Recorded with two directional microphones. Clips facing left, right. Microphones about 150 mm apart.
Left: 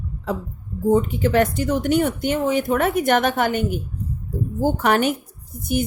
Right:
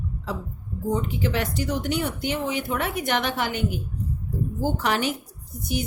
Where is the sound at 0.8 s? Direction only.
50° left (ahead or behind).